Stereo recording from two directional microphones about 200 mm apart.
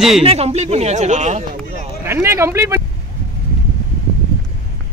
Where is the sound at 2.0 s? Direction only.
10° right (ahead or behind).